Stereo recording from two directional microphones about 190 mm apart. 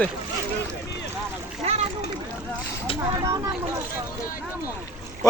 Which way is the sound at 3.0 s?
15° right (ahead or behind).